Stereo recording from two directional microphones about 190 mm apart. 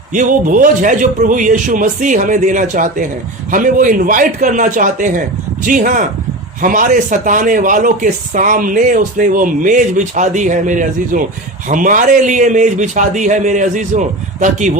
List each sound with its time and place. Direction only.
0.1 s a man's voice: 45° right (ahead or behind)